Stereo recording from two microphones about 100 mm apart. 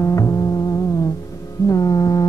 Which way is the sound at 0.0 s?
35° left (ahead or behind).